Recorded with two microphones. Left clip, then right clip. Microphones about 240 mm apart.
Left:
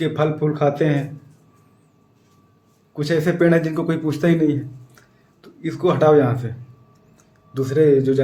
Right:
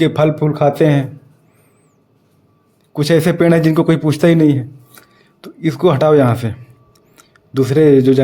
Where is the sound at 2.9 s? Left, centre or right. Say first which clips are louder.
Right 7 dB; right.